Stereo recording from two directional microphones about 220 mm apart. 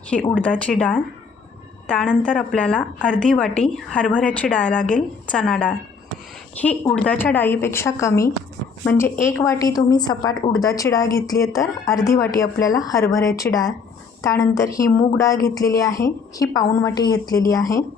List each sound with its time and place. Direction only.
0.3 s a woman's voice: 5° left (ahead or behind)